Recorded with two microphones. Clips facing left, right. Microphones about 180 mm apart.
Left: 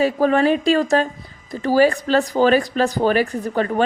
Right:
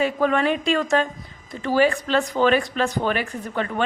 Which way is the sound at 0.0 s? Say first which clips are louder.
Left 4 dB; 35° left (ahead or behind).